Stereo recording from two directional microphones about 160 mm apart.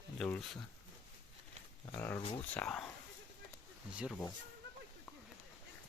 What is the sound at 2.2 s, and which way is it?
Speech, 35° left (ahead or behind).